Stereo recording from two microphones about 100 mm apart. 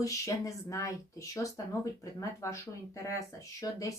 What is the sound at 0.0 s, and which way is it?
Speech, 35° left (ahead or behind).